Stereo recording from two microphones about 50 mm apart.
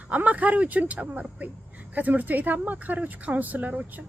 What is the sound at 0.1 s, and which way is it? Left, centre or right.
Speech, right.